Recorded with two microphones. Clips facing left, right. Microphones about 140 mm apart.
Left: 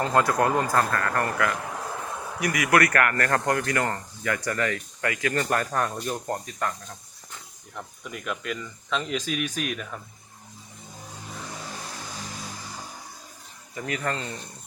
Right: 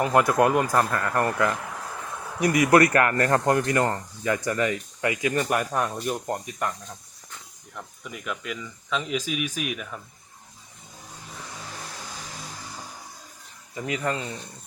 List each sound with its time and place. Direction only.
0.0 s speech: 20° right (ahead or behind)
8.0 s speech: centre (ahead or behind)
13.7 s speech: 20° right (ahead or behind)